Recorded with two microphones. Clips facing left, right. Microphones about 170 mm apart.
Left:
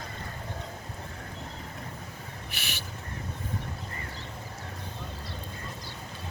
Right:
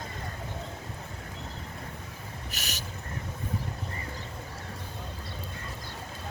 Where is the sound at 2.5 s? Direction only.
40° right (ahead or behind).